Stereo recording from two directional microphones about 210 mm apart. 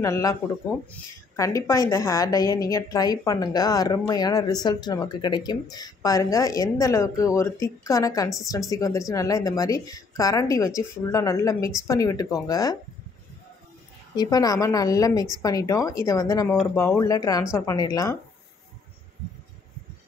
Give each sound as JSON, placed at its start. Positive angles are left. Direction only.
{"t": 0.0, "sound": "a woman's voice", "side_deg": 15}
{"t": 14.1, "sound": "a woman's voice", "side_deg": 20}